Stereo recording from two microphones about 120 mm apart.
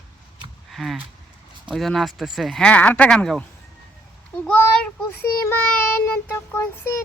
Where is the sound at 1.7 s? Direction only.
Centre (ahead or behind).